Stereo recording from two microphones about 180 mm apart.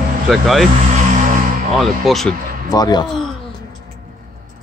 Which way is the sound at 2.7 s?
20° left (ahead or behind).